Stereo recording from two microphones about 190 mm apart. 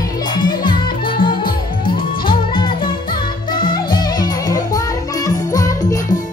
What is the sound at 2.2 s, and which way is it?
Music, 25° left (ahead or behind).